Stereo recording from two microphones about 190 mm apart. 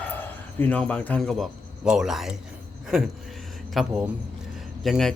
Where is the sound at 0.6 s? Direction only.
10° left (ahead or behind).